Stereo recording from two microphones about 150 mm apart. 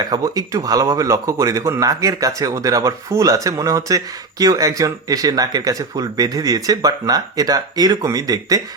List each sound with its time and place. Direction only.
0.0 s speech: 25° right (ahead or behind)